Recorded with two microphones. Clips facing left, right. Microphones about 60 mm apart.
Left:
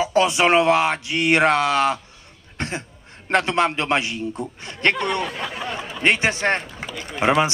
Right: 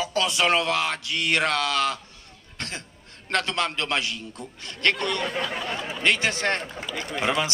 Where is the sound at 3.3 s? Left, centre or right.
Left.